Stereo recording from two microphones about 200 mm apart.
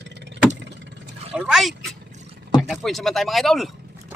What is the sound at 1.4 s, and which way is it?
Speech, centre (ahead or behind).